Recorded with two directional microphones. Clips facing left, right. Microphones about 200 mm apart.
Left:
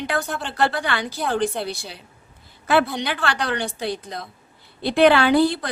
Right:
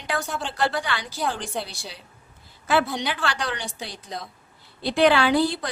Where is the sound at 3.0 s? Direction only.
60° left (ahead or behind).